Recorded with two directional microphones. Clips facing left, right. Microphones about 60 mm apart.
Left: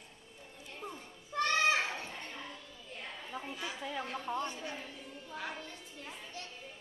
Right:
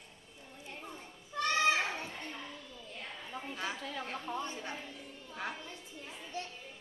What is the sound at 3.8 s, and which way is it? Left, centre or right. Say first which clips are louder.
Speech: left 1 dB; centre.